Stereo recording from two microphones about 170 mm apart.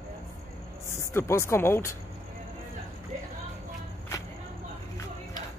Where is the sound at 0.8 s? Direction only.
15° left (ahead or behind).